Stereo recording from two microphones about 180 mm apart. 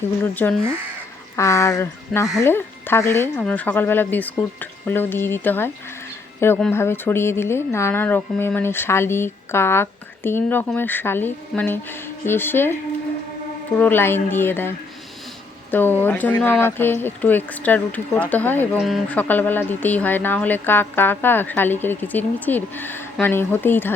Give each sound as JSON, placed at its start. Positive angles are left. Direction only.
{"t": 0.3, "sound": "speech", "side_deg": 10}
{"t": 13.7, "sound": "speech", "side_deg": 10}
{"t": 15.7, "sound": "speech", "side_deg": 10}